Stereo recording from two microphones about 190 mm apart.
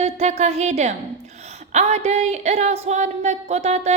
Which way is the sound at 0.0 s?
35° right (ahead or behind).